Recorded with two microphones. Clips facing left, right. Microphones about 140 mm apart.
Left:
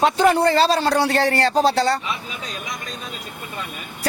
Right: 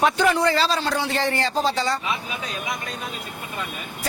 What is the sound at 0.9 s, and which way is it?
Speech, 75° left (ahead or behind).